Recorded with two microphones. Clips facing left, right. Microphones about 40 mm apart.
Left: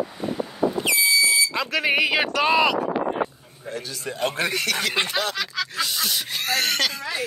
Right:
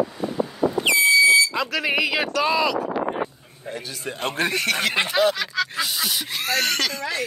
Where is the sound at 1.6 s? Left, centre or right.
Left.